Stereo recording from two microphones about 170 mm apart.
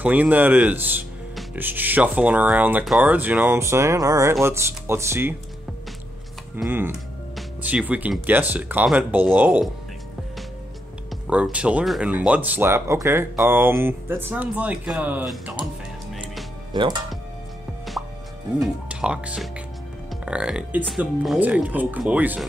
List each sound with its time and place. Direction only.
0.0 s speech: 10° right (ahead or behind)
6.7 s speech: 15° right (ahead or behind)
11.2 s speech: 5° right (ahead or behind)
16.7 s speech: 25° right (ahead or behind)
18.6 s speech: 5° right (ahead or behind)